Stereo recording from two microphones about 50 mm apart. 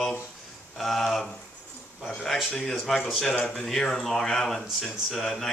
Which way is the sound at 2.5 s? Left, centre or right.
Centre.